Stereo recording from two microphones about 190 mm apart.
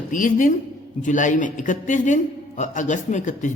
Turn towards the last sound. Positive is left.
turn(degrees=40)  # may be behind; listen again after turning